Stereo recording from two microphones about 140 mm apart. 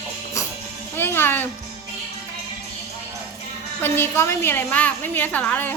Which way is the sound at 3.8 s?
15° left (ahead or behind).